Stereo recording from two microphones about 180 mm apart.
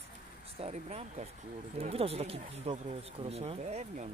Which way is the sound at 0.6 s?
35° right (ahead or behind).